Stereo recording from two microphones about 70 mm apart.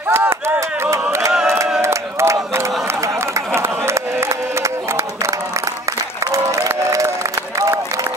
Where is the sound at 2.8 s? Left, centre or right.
Right.